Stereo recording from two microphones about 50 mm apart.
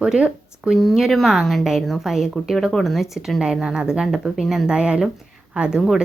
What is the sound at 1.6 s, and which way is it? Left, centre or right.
Speech, centre.